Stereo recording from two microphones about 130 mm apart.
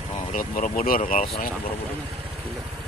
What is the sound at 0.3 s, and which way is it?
Speech, 90° left.